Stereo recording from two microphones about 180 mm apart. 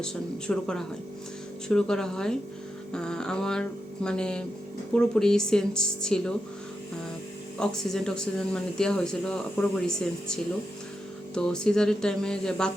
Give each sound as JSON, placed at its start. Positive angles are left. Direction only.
{"t": 0.0, "sound": "speech", "side_deg": 5}
{"t": 7.6, "sound": "speech", "side_deg": 5}